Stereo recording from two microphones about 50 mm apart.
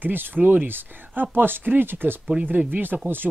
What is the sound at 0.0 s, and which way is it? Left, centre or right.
Speech, right.